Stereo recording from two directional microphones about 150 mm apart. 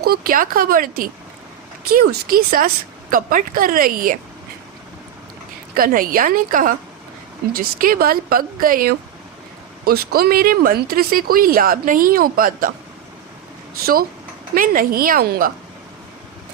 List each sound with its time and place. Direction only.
0.0 s speech: 80° right
3.1 s speech: 65° right (ahead or behind)
5.7 s speech: 70° right (ahead or behind)
9.8 s speech: 90° right; by 12.7 s 70° right (ahead or behind)
14.5 s speech: 65° right (ahead or behind); by 15.5 s 80° right